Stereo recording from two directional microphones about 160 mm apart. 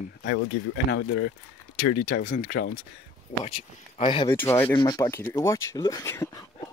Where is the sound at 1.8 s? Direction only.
65° left (ahead or behind).